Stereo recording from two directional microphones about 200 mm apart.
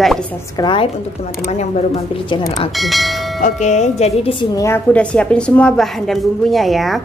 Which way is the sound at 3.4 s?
35° left (ahead or behind).